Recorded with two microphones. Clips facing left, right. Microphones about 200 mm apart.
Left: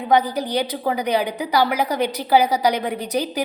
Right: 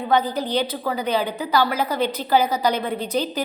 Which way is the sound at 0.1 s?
15° left (ahead or behind).